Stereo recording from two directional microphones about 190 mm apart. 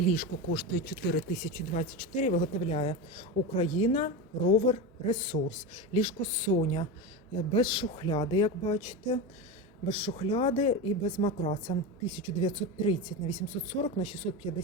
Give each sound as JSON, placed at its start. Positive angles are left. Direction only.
{"t": 0.1, "sound": "speech", "side_deg": 50}
{"t": 1.4, "sound": "speech", "side_deg": 40}